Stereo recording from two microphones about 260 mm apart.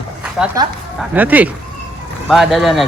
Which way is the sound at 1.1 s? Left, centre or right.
Centre.